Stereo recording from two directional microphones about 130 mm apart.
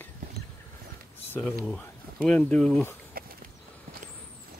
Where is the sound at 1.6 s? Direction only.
5° left (ahead or behind).